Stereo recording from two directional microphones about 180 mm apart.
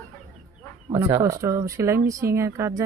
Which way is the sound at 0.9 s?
15° right (ahead or behind).